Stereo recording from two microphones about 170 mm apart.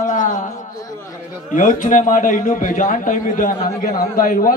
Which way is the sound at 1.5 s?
50° left (ahead or behind).